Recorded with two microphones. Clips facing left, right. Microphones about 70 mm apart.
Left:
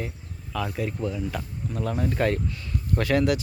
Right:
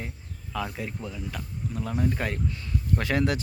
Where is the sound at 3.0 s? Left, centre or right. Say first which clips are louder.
Left 5 dB; right.